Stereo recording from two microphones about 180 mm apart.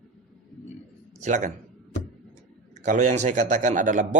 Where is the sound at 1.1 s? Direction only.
40° right (ahead or behind).